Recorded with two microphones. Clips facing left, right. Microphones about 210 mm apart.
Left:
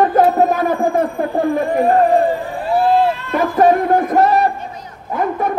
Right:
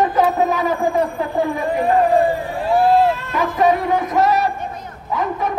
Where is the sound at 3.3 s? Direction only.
50° left (ahead or behind).